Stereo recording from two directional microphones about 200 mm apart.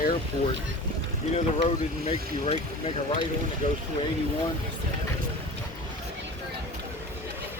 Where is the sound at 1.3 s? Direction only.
30° left (ahead or behind).